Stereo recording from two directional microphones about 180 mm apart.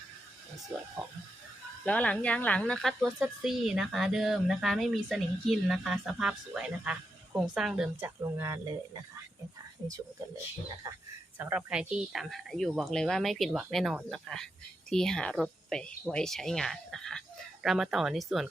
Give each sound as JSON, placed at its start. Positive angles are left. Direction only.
{"t": 1.0, "sound": "speech", "side_deg": 0}
{"t": 11.3, "sound": "speech", "side_deg": -10}